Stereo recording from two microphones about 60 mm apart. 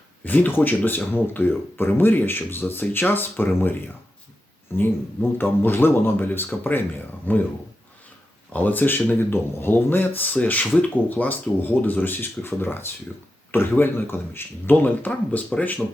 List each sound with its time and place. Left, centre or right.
0.3 s speech: left
5.4 s speech: left
8.5 s speech: left